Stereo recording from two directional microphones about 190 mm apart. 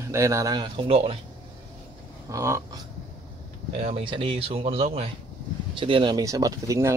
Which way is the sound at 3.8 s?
30° right (ahead or behind).